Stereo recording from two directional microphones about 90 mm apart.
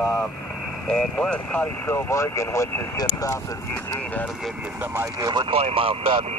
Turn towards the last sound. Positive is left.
turn(degrees=-90)